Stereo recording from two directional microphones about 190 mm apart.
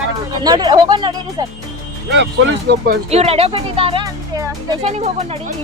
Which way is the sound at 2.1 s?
70° right (ahead or behind).